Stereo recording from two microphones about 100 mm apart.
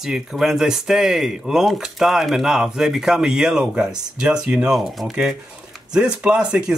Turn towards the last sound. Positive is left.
turn(degrees=-5)  # may be behind; listen again after turning